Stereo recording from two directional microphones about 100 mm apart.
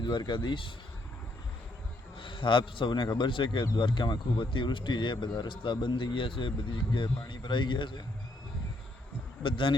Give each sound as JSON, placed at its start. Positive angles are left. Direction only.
{"t": 0.0, "sound": "speech", "side_deg": 50}
{"t": 2.1, "sound": "a man's voice", "side_deg": 55}
{"t": 9.4, "sound": "a man's voice", "side_deg": 55}